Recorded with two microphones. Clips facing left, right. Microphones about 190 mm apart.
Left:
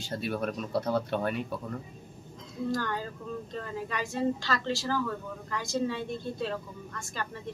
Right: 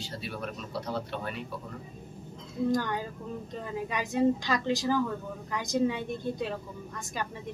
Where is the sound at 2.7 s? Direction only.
20° right (ahead or behind).